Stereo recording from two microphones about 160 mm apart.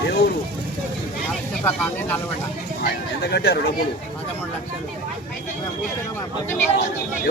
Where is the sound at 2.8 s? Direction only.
90° left.